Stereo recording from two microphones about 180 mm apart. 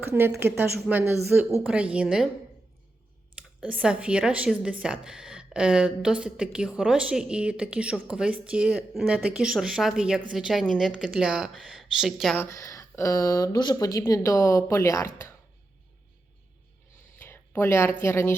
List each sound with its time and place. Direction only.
0.0 s speech: 10° right (ahead or behind)
3.6 s a woman's voice: 5° right (ahead or behind)
12.4 s speech: 15° left (ahead or behind)
17.2 s a sound: 10° left (ahead or behind)
18.0 s speech: 15° left (ahead or behind)